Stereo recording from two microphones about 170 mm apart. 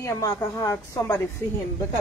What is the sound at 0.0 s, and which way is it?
A woman's voice, 20° left (ahead or behind).